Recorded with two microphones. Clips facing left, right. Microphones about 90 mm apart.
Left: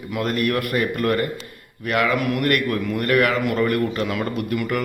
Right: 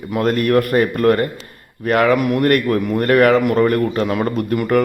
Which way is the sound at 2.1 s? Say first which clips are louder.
Right 5 dB; 25° right (ahead or behind).